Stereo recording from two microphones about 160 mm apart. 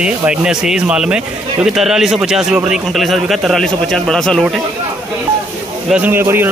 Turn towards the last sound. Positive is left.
turn(degrees=-15)  # may be behind; listen again after turning